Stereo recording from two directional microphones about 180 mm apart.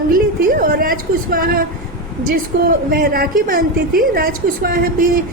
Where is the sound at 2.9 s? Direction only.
55° right (ahead or behind).